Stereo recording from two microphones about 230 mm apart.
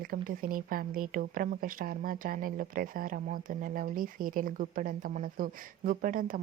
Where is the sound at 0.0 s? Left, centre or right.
Right.